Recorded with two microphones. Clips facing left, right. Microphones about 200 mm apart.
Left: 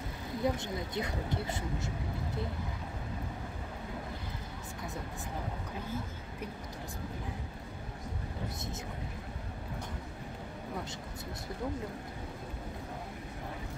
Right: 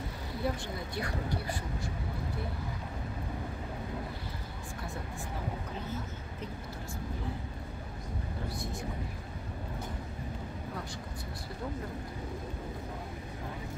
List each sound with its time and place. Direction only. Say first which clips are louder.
0.4 s speech: left 2 dB; 20° left (ahead or behind)